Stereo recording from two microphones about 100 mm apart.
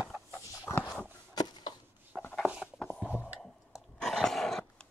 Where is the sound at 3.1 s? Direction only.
15° right (ahead or behind).